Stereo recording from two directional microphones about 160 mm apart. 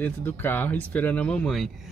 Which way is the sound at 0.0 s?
10° left (ahead or behind).